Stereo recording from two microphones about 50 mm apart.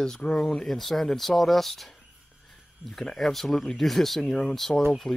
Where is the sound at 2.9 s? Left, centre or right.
Centre.